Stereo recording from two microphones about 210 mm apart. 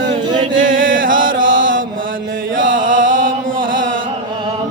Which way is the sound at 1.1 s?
40° right (ahead or behind).